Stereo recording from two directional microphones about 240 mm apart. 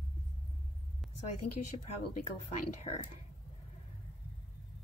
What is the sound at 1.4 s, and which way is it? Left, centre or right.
Speech, left.